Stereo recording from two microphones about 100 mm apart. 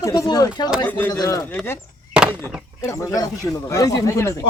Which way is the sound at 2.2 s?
10° right (ahead or behind).